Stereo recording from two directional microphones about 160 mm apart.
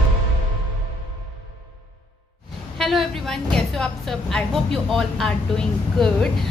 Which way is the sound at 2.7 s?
Centre (ahead or behind).